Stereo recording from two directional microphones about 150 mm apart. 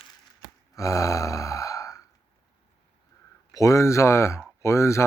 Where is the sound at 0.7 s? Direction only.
20° left (ahead or behind).